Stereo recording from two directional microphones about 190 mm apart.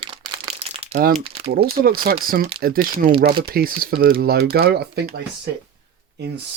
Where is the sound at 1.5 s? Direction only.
55° right (ahead or behind).